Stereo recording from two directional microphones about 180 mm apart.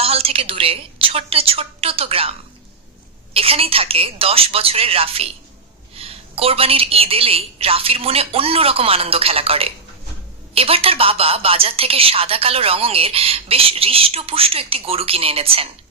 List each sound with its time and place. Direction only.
0.0 s a woman's voice: 35° right (ahead or behind)
3.3 s a woman's voice: 30° right (ahead or behind)